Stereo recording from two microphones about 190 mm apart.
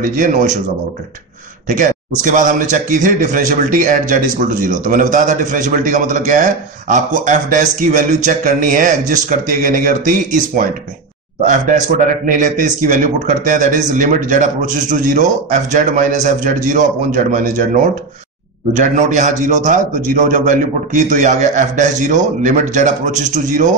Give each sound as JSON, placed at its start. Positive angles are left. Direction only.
{"t": 0.1, "sound": "a man's voice", "side_deg": -45}
{"t": 1.7, "sound": "a man's voice", "side_deg": -40}